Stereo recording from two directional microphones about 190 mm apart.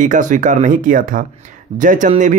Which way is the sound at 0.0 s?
40° right (ahead or behind).